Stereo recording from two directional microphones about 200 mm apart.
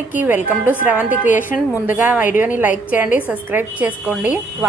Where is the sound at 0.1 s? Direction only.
10° right (ahead or behind).